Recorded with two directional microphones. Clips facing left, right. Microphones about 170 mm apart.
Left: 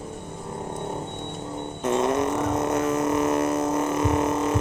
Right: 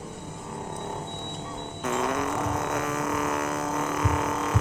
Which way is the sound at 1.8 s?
25° left (ahead or behind).